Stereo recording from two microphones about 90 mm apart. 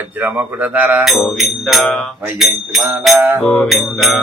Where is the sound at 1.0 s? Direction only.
Centre (ahead or behind).